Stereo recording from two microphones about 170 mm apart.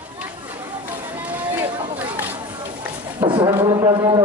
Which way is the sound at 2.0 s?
10° right (ahead or behind).